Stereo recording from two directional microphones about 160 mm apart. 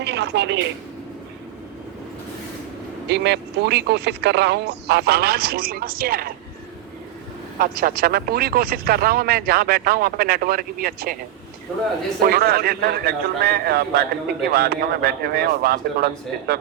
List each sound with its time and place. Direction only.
0.0 s speech: 90° right
3.1 s speech: 90° right; by 6.3 s 70° right (ahead or behind)
7.6 s speech: 70° right (ahead or behind)
12.2 s speech: 75° right (ahead or behind)